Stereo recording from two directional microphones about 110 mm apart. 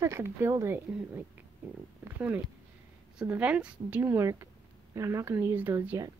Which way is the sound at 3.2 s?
10° right (ahead or behind).